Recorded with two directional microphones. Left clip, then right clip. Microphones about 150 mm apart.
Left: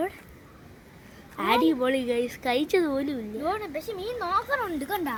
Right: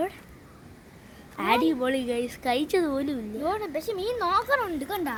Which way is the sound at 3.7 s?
80° right.